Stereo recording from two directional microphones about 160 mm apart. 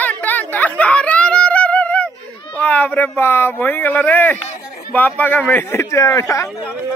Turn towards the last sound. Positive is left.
turn(degrees=20)  # may be behind; listen again after turning